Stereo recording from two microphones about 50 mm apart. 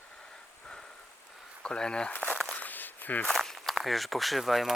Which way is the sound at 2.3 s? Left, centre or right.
Centre.